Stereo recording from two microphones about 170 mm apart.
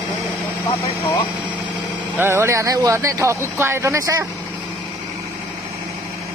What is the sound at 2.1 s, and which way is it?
Speech, 15° right (ahead or behind).